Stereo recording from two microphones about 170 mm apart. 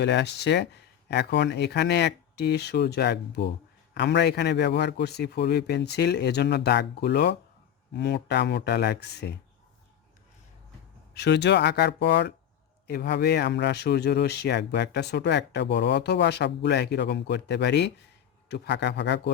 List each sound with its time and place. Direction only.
0.0 s speech: 90° left; by 9.3 s 75° left (ahead or behind)
11.1 s speech: 80° left
12.9 s speech: 75° left (ahead or behind); by 19.3 s 90° left